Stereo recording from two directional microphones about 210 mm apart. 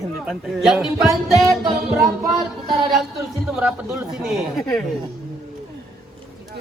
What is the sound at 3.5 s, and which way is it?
Speech, 5° right (ahead or behind).